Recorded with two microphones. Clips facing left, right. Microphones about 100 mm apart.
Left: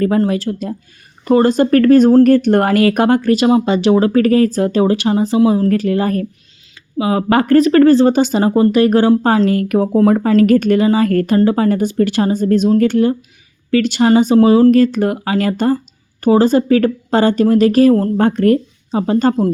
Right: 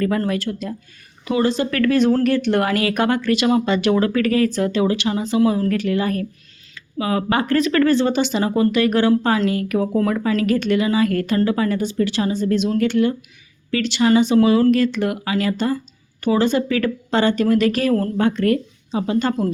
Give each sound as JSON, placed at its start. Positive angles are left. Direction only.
{"t": 0.2, "sound": "speech", "side_deg": 35}
{"t": 1.2, "sound": "speech", "side_deg": 45}
{"t": 5.6, "sound": "speech", "side_deg": 35}
{"t": 7.3, "sound": "speech", "side_deg": 45}